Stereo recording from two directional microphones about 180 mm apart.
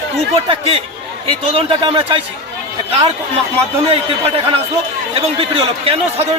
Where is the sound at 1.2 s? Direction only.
30° right (ahead or behind).